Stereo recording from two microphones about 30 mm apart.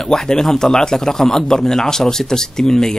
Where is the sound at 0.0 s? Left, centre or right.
Centre.